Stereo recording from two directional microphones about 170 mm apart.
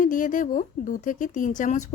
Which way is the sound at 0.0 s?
50° left (ahead or behind).